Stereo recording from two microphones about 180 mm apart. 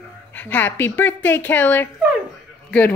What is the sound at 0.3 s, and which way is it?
Speech, 10° left (ahead or behind).